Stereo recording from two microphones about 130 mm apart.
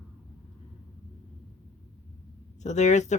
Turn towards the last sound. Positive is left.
turn(degrees=65)  # may be behind; listen again after turning